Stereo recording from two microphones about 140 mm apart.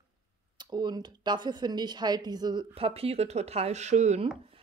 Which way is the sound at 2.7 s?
45° right (ahead or behind).